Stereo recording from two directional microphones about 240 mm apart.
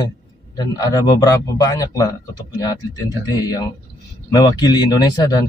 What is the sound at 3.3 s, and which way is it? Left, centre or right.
Speech, centre.